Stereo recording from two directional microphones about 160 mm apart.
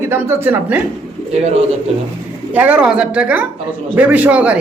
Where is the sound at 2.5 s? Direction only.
10° right (ahead or behind).